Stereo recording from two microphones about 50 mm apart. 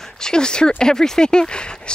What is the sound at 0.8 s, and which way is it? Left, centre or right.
A woman's voice, centre.